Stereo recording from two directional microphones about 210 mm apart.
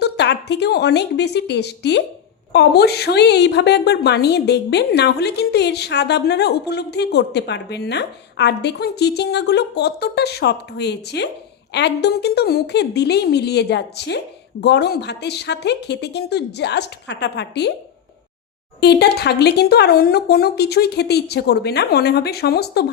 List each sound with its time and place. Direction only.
0.0 s a woman's voice: 55° left (ahead or behind)
18.8 s a woman's voice: 50° left (ahead or behind)